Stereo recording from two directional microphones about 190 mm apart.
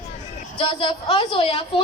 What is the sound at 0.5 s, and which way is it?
A woman's voice, 30° left (ahead or behind).